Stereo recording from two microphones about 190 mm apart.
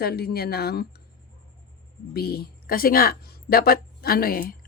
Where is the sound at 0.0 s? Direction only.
55° left (ahead or behind).